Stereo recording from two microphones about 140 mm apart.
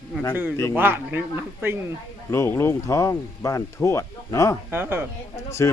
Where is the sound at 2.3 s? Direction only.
20° left (ahead or behind).